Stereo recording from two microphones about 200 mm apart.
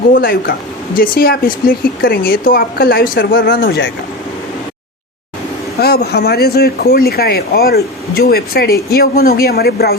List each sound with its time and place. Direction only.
0.1 s speech: 50° left (ahead or behind)
5.8 s speech: 50° left (ahead or behind)